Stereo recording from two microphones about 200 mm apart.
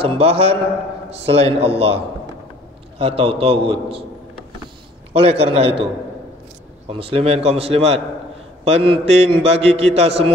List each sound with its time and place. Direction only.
0.0 s a man's voice: 30° right (ahead or behind)
5.1 s a man's voice: 30° right (ahead or behind)
6.9 s a man's voice: 30° right (ahead or behind)